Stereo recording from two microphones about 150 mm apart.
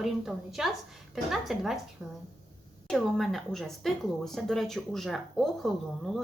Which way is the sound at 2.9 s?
Centre (ahead or behind).